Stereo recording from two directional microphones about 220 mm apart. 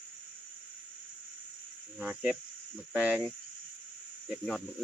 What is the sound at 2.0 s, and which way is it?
Speech, 5° right (ahead or behind).